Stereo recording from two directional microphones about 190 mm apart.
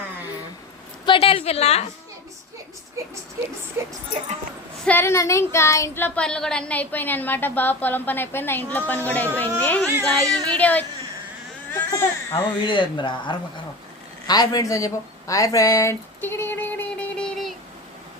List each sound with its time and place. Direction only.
1.0 s a woman's voice: 30° left (ahead or behind)
3.8 s speech: 10° right (ahead or behind)
4.9 s a sound: 10° left (ahead or behind)
11.7 s baby cry: 15° left (ahead or behind)
12.6 s speech: 25° left (ahead or behind)
14.3 s a sound: 20° left (ahead or behind)